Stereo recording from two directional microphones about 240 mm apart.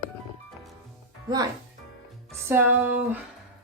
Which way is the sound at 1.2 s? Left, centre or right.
Centre.